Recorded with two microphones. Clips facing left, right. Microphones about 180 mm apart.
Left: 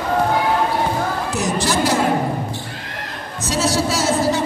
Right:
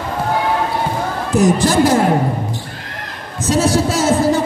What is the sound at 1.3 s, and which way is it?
Speech, 50° right (ahead or behind).